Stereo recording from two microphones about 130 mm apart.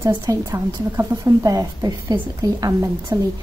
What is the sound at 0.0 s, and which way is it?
A woman's voice, 25° right (ahead or behind).